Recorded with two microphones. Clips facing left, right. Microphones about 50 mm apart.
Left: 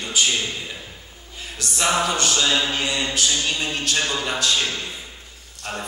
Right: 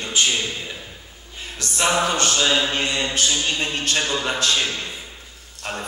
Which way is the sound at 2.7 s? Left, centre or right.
Right.